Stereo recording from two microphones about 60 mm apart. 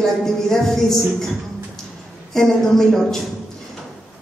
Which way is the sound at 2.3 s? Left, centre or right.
Centre.